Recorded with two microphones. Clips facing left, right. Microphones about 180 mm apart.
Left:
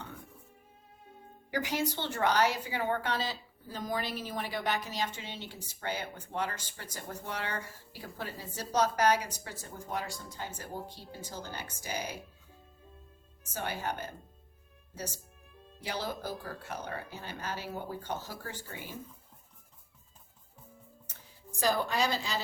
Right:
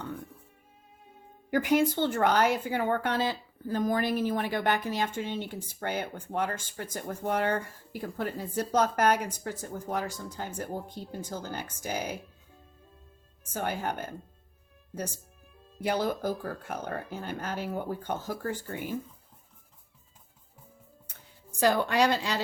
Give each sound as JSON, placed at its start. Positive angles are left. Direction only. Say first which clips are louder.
{"t": 1.5, "sound": "a woman's voice", "louder": "right 8 dB", "side_deg": -55}
{"t": 13.5, "sound": "a woman's voice", "louder": "right 4 dB", "side_deg": -50}
{"t": 15.8, "sound": "a woman's voice", "louder": "right 8 dB", "side_deg": -55}
{"t": 21.6, "sound": "a woman's voice", "louder": "right 5 dB", "side_deg": -70}